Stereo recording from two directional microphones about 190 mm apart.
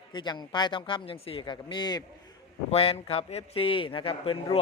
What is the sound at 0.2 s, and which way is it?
A man's voice, 25° left (ahead or behind).